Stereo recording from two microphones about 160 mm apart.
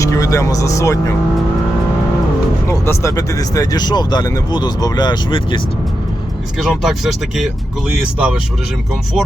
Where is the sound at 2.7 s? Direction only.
15° left (ahead or behind).